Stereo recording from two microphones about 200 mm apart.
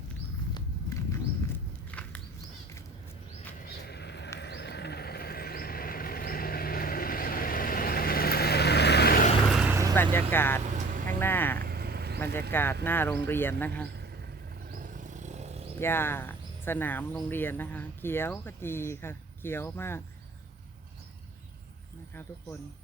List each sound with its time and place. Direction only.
1.1 s wild animals: 10° left (ahead or behind)
3.6 s bird flight: 55° left (ahead or behind)
4.4 s vehicle: 55° left (ahead or behind)
9.6 s vehicle: 15° right (ahead or behind)
9.9 s vehicle: 10° left (ahead or behind)
10.6 s vehicle: 40° right (ahead or behind)
11.2 s vehicle: 10° left (ahead or behind)
11.6 s vehicle: 50° right (ahead or behind)
12.2 s a sound: 10° left (ahead or behind)
12.8 s speech: 10° left (ahead or behind)
14.7 s wild animals: 40° right (ahead or behind)
15.8 s speech: 10° left (ahead or behind)